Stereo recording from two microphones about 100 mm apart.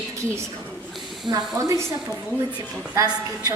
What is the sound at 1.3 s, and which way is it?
Speech, 55° right (ahead or behind).